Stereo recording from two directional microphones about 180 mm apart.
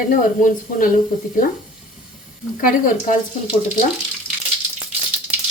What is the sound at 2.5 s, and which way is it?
Speech, 50° left (ahead or behind).